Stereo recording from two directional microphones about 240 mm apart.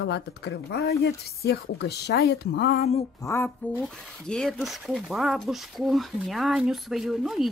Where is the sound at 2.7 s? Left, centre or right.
Left.